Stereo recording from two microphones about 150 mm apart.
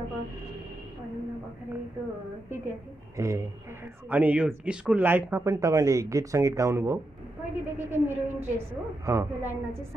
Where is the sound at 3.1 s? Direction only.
20° right (ahead or behind).